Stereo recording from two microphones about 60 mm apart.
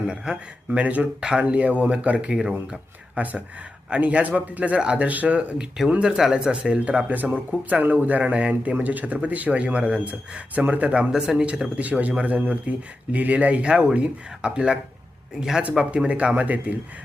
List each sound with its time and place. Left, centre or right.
0.1 s speech: centre
3.2 s speech: right
11.1 s speech: centre